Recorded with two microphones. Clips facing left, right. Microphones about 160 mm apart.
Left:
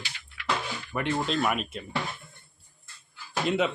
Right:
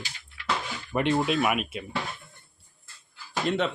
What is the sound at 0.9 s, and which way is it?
Speech, 20° right (ahead or behind).